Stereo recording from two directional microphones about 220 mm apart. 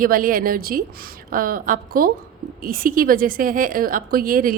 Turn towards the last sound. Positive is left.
turn(degrees=-40)  # may be behind; listen again after turning